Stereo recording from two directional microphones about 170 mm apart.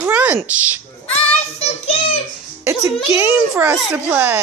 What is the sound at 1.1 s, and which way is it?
Child singing, 35° left (ahead or behind).